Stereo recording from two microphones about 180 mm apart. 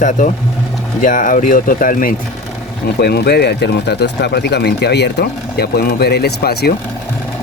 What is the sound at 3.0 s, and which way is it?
Speech, 60° left (ahead or behind).